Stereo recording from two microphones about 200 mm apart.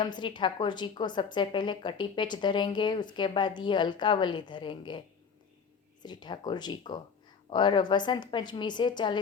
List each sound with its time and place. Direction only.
0.0 s a woman's voice: 25° left (ahead or behind)